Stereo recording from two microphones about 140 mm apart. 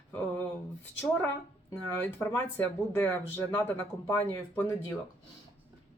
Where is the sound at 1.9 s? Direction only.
15° left (ahead or behind).